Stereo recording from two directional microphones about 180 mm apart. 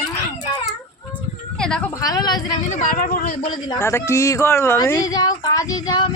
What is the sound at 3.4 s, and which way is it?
Speech, 25° left (ahead or behind).